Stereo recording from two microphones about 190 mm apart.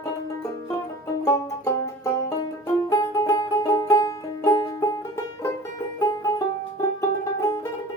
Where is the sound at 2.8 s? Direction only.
15° left (ahead or behind).